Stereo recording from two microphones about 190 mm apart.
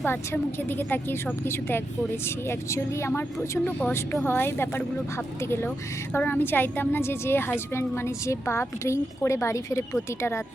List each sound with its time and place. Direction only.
0.0 s a woman's voice: 10° left (ahead or behind)